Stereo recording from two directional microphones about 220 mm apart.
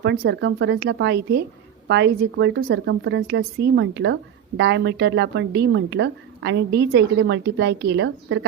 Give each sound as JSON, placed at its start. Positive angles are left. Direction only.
{"t": 0.0, "sound": "a woman's voice", "side_deg": -50}